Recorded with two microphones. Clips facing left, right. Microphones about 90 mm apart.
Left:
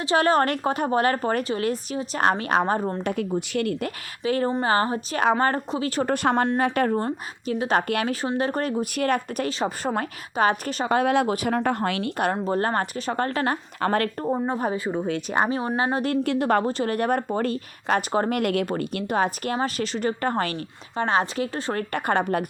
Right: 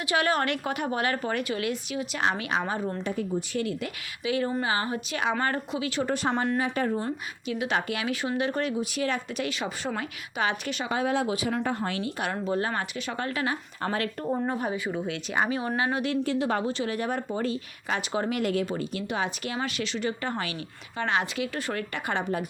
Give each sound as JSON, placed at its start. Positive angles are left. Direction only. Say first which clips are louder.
{"t": 0.0, "sound": "a woman's voice", "louder": "left 5 dB", "side_deg": 35}
{"t": 3.0, "sound": "a woman's voice", "louder": "left 4 dB", "side_deg": 70}
{"t": 6.7, "sound": "speech", "louder": "left 5 dB", "side_deg": 65}
{"t": 7.0, "sound": "speech", "louder": "left 4 dB", "side_deg": 40}
{"t": 8.1, "sound": "a woman's voice", "louder": "left 3 dB", "side_deg": 35}
{"t": 10.9, "sound": "speech", "louder": "left 6 dB", "side_deg": 65}
{"t": 12.1, "sound": "speech", "louder": "left 5 dB", "side_deg": 45}
{"t": 13.8, "sound": "speech", "louder": "left 7 dB", "side_deg": 90}
{"t": 14.3, "sound": "a woman's voice", "louder": "left 3 dB", "side_deg": 25}
{"t": 14.6, "sound": "a woman's voice", "louder": "left 4 dB", "side_deg": 35}
{"t": 16.2, "sound": "speech", "louder": "left 5 dB", "side_deg": 60}
{"t": 20.9, "sound": "a woman's voice", "louder": "left 5 dB", "side_deg": 35}